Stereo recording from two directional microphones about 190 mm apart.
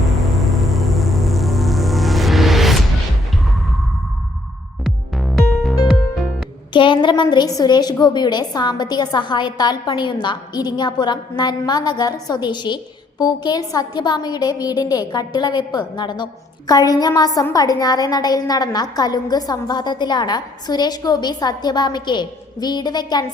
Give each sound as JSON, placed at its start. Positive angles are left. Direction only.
{"t": 0.2, "sound": "music", "side_deg": 0}
{"t": 4.8, "sound": "music", "side_deg": 0}
{"t": 6.7, "sound": "a woman's voice", "side_deg": 25}